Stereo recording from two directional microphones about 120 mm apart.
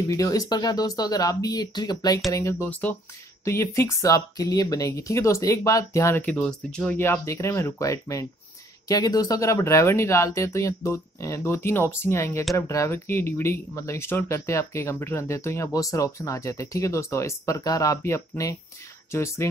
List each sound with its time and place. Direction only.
0.1 s speech: 30° left (ahead or behind)
2.7 s speech: 15° left (ahead or behind)
6.2 s speech: 5° left (ahead or behind)
7.0 s speech: 20° left (ahead or behind)